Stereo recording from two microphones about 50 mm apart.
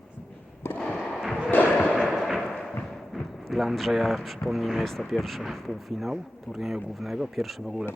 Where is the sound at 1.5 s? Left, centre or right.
Left.